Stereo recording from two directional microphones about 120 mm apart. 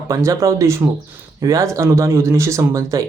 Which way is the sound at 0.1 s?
30° right (ahead or behind).